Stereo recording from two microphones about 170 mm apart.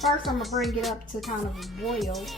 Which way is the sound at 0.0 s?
Centre (ahead or behind).